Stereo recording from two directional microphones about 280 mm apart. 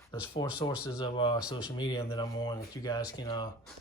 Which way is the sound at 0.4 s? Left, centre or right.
Centre.